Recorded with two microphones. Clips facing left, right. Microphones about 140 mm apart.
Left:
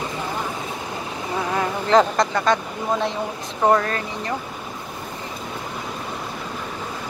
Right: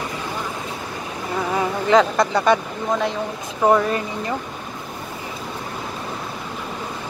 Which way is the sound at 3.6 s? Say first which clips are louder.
Right 1 dB; 5° right (ahead or behind).